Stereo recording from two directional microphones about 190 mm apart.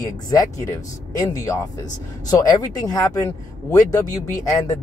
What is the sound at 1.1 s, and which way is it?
Speech, 15° left (ahead or behind).